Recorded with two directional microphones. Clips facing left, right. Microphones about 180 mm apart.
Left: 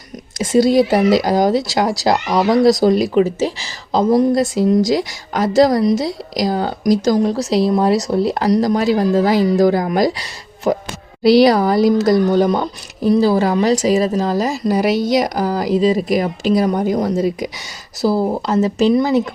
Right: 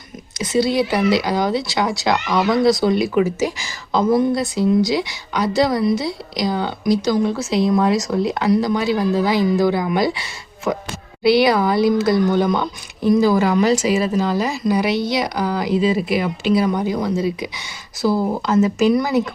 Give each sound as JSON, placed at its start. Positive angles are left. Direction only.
{"t": 0.3, "sound": "speech", "side_deg": 45}
{"t": 18.0, "sound": "speech", "side_deg": 30}